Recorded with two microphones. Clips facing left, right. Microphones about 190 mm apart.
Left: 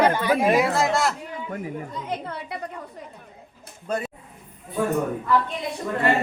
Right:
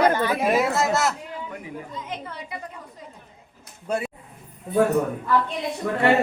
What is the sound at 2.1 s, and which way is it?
Speech, 65° left (ahead or behind).